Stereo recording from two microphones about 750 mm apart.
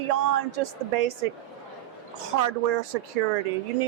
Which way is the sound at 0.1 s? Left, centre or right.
Right.